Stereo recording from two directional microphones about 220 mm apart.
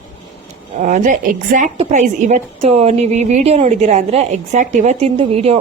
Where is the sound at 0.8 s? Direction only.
35° right (ahead or behind).